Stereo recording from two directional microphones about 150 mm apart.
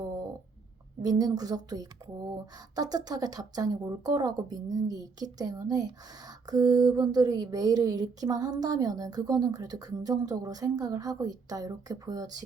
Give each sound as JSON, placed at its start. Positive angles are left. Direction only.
{"t": 1.0, "sound": "speech", "side_deg": -25}